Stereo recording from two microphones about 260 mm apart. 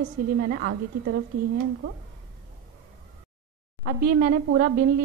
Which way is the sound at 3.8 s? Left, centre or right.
Right.